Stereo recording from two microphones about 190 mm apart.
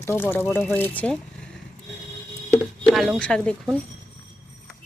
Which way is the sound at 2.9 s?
5° right (ahead or behind).